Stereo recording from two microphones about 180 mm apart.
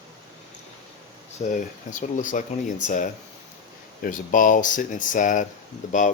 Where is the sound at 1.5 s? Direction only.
45° left (ahead or behind).